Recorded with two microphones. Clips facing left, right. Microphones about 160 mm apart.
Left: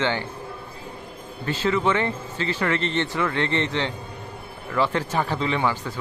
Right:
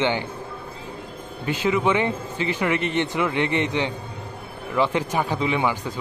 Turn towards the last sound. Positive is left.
turn(degrees=-15)  # may be behind; listen again after turning